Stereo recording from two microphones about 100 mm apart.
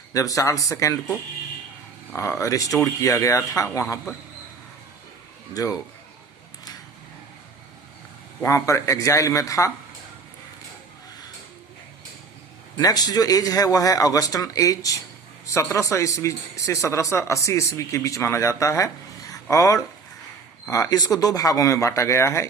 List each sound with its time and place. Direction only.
0.1 s speech: 35° left (ahead or behind)
2.1 s speech: 30° left (ahead or behind)
5.5 s speech: 35° left (ahead or behind)
8.4 s speech: 30° left (ahead or behind)
12.7 s speech: 40° left (ahead or behind)